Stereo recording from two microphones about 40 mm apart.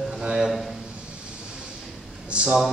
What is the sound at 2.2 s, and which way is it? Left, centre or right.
Speech, right.